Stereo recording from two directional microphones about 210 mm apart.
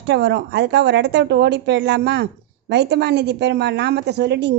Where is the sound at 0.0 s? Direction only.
55° right (ahead or behind).